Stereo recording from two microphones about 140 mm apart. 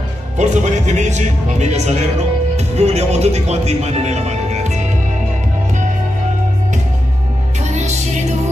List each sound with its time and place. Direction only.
0.4 s a man's voice: 55° right (ahead or behind)
7.6 s music: 55° right (ahead or behind)